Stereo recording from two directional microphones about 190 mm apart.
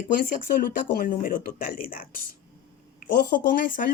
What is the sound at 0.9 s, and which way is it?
A woman's voice, 50° left (ahead or behind).